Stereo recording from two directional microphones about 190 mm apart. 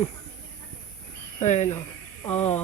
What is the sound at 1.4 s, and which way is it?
Speech, 35° left (ahead or behind).